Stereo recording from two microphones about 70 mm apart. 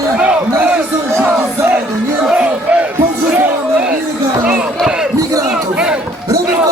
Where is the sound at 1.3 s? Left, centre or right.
Right.